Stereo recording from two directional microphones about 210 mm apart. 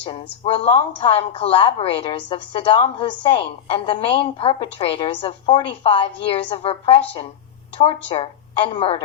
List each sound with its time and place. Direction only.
0.0 s speech: 25° left (ahead or behind)
8.1 s a woman's voice: 25° left (ahead or behind)